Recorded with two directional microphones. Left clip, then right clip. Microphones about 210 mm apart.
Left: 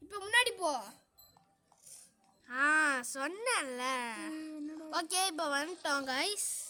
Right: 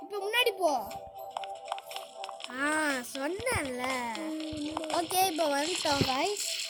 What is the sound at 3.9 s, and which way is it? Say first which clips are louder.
Speech: right 2 dB; 40° left (ahead or behind).